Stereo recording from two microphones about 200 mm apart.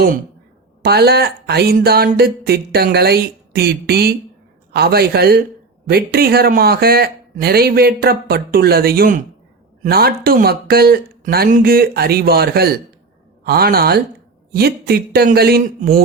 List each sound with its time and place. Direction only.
0.8 s speech: 55° right (ahead or behind)